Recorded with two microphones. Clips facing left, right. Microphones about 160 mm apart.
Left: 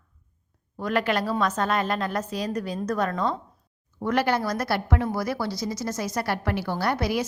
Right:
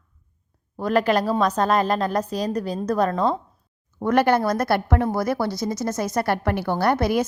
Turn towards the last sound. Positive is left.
turn(degrees=-50)  # may be behind; listen again after turning